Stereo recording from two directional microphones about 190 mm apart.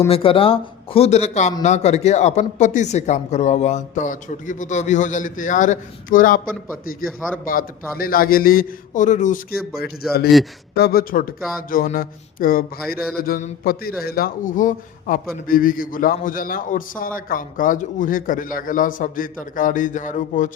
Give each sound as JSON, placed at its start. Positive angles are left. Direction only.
{"t": 0.1, "sound": "a man's voice", "side_deg": 30}
{"t": 9.7, "sound": "a man's voice", "side_deg": 55}